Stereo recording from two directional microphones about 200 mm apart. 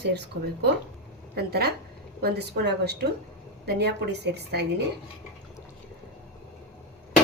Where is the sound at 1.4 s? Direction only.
55° right (ahead or behind).